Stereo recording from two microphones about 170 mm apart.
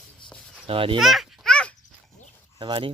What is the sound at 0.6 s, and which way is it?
Speech, 30° right (ahead or behind).